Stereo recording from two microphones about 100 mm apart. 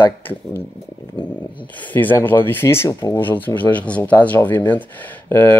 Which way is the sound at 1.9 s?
20° left (ahead or behind).